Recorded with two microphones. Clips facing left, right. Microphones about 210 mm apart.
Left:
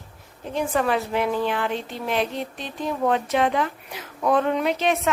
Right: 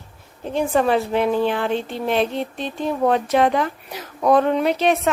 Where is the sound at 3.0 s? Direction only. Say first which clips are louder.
Right 4 dB; 40° right (ahead or behind).